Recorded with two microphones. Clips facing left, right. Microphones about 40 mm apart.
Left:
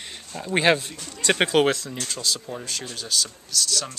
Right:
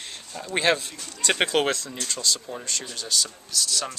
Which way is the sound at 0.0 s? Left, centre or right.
Centre.